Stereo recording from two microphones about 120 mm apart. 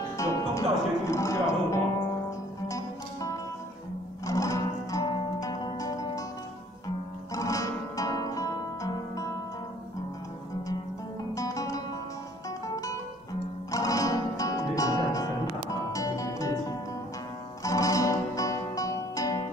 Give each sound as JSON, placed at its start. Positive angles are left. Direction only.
{"t": 0.2, "sound": "speech", "side_deg": 25}
{"t": 2.7, "sound": "music", "side_deg": 25}
{"t": 7.3, "sound": "music", "side_deg": 25}
{"t": 11.3, "sound": "music", "side_deg": 30}
{"t": 17.6, "sound": "music", "side_deg": 30}